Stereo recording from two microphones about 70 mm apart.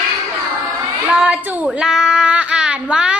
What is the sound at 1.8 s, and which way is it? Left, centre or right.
Child singing, centre.